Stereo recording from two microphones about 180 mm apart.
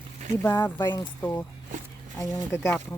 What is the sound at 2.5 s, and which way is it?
Speech, 15° left (ahead or behind).